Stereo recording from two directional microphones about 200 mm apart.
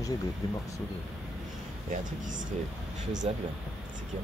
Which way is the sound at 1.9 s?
40° right (ahead or behind).